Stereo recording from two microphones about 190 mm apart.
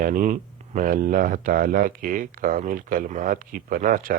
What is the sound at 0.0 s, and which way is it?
Speech, 45° right (ahead or behind).